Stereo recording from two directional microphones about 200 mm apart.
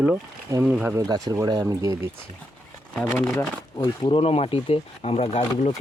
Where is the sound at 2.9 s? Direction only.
5° left (ahead or behind).